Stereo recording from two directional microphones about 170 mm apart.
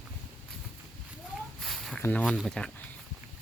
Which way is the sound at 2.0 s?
5° left (ahead or behind).